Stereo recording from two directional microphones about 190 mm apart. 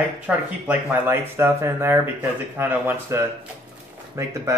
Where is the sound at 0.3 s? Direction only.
5° right (ahead or behind).